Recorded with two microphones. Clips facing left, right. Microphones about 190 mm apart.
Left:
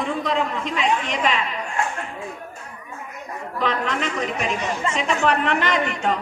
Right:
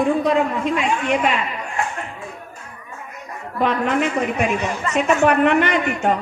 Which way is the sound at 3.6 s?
55° right (ahead or behind).